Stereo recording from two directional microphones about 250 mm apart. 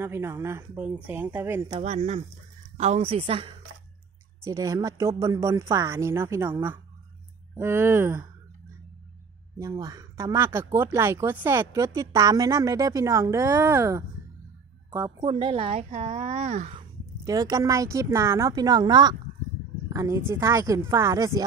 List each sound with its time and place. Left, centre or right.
0.0 s speech: centre
1.8 s speech: right; by 8.3 s centre
9.6 s speech: centre
17.3 s speech: centre